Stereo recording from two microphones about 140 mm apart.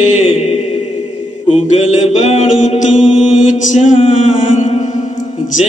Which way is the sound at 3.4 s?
65° left (ahead or behind).